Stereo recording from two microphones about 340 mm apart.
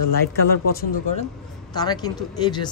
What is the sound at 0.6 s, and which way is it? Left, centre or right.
Speech, left.